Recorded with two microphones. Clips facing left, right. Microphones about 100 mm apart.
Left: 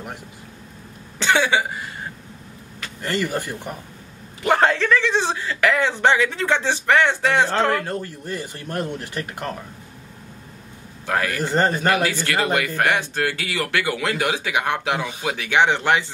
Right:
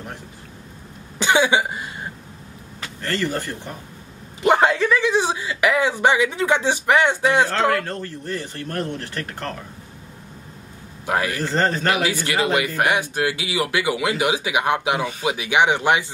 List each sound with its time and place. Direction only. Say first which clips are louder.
1.1 s speech: right 1 dB; 15° right (ahead or behind)
3.0 s speech: even; 15° left (ahead or behind)
4.4 s a sound: right 2 dB; 20° right (ahead or behind)
4.6 s speech: even; 10° right (ahead or behind)
7.8 s speech: left 1 dB; 10° left (ahead or behind)
11.1 s speech: right 1 dB; 15° right (ahead or behind)
11.4 s speech: left 3 dB; 15° left (ahead or behind)
11.9 s speech: left 1 dB; 15° right (ahead or behind)